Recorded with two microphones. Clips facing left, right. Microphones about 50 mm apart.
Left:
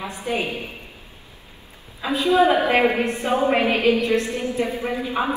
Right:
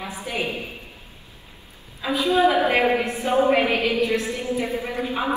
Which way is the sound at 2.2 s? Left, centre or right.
Left.